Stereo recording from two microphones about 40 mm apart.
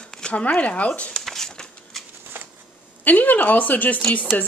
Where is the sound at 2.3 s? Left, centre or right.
Right.